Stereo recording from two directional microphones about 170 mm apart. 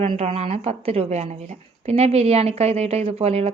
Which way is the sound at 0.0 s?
35° right (ahead or behind).